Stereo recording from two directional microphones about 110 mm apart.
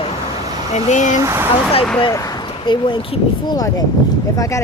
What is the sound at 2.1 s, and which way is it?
Speech, 30° left (ahead or behind).